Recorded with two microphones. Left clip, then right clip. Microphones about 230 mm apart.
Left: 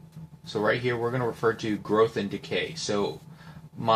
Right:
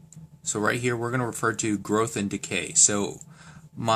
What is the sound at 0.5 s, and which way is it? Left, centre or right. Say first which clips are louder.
Speech: even; right.